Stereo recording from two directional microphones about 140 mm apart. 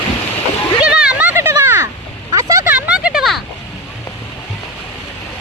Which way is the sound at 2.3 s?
20° right (ahead or behind).